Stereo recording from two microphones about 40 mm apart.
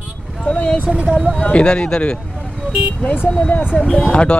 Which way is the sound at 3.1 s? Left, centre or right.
Left.